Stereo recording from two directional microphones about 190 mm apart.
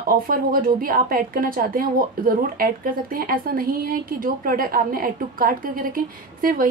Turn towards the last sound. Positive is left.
turn(degrees=-50)  # may be behind; listen again after turning